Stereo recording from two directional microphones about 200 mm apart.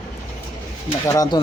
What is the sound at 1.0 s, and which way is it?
Speech, 15° left (ahead or behind).